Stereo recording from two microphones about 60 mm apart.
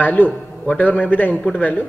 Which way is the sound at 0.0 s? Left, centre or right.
Left.